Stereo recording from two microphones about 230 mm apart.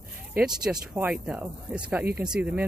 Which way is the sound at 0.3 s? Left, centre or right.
Centre.